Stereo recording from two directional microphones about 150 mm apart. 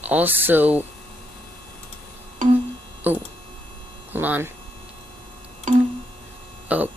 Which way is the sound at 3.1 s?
10° right (ahead or behind).